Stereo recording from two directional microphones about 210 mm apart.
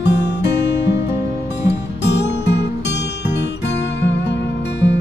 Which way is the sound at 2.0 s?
55° left (ahead or behind).